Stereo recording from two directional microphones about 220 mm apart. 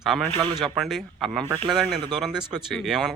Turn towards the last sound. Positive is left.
turn(degrees=0)  # may be behind; listen again after turning